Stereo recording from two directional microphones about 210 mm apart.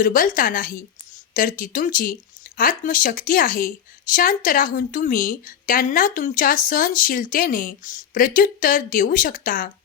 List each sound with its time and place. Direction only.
0.0 s a woman's voice: 40° left (ahead or behind)